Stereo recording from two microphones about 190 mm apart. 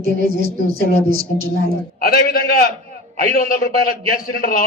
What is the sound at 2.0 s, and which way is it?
A man's voice, 50° left (ahead or behind).